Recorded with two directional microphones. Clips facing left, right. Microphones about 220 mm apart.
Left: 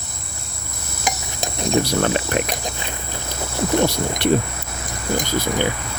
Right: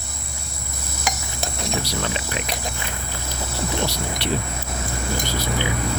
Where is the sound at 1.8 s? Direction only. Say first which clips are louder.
Left 7 dB; 55° left (ahead or behind).